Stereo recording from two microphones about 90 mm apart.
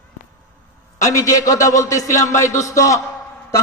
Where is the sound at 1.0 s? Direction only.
35° left (ahead or behind).